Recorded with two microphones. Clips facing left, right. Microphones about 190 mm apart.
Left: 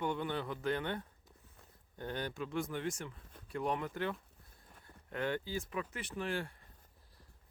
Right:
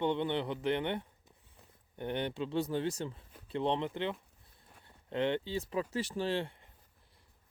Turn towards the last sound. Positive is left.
turn(degrees=-20)  # may be behind; listen again after turning